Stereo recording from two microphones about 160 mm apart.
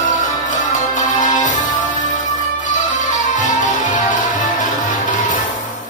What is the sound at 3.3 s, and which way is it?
Music, 50° left (ahead or behind).